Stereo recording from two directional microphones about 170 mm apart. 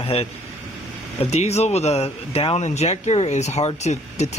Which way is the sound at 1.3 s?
40° left (ahead or behind).